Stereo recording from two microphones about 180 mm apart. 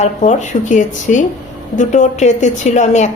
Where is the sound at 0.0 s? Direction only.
40° left (ahead or behind).